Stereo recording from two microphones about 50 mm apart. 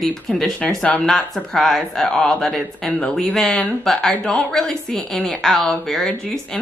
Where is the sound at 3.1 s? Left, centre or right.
Centre.